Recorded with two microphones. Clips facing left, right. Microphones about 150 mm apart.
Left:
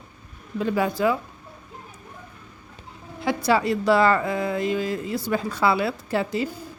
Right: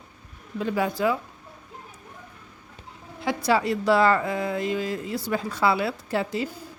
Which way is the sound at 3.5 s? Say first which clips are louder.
Left 1 dB; 60° left (ahead or behind).